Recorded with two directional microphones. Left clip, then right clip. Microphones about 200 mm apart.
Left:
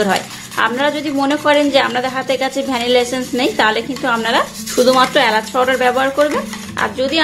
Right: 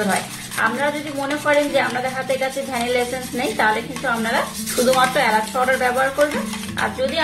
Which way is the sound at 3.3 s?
55° left (ahead or behind).